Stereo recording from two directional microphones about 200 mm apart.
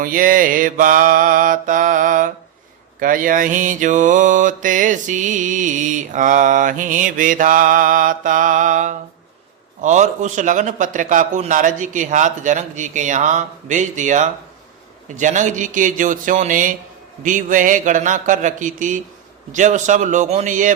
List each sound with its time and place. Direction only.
0.0 s mantra: 45° right (ahead or behind)